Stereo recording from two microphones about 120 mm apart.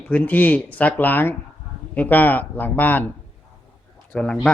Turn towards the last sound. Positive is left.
turn(degrees=10)  # may be behind; listen again after turning